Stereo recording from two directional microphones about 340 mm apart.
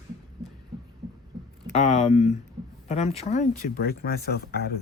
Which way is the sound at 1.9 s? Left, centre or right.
Left.